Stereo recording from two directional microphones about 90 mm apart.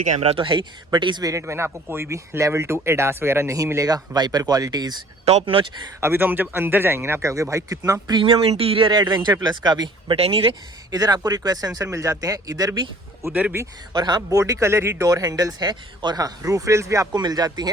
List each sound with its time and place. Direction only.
0.2 s speech: 80° right; by 1.2 s 60° right (ahead or behind)
1.2 s speech: 35° right (ahead or behind)
3.8 s speech: 45° right (ahead or behind)
5.5 s speech: 90° right
6.0 s speech: 25° right (ahead or behind)
8.1 s speech: 80° right
8.9 s speech: 55° right (ahead or behind)
10.2 s speech: 90° right
10.9 s speech: 45° right (ahead or behind)
13.3 s speech: 15° right (ahead or behind)
13.9 s speech: 50° right (ahead or behind)
17.2 s speech: 50° right (ahead or behind)